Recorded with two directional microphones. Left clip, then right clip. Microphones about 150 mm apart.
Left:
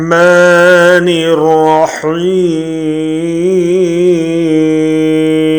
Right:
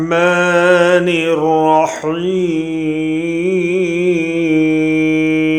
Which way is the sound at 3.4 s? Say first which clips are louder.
Left 7 dB; 5° right (ahead or behind).